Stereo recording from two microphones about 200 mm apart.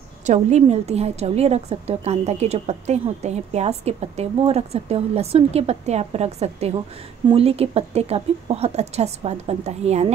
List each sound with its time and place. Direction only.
0.3 s a woman's voice: 35° right (ahead or behind)